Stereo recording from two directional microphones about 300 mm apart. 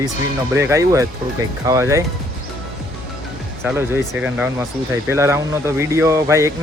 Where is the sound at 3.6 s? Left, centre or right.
Centre.